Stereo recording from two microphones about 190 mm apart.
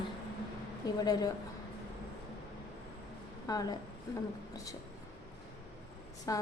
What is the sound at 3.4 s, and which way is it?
Speech, 20° left (ahead or behind).